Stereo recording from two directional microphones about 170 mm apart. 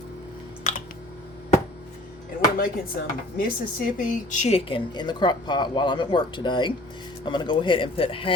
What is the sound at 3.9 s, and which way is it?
Speech, 50° left (ahead or behind).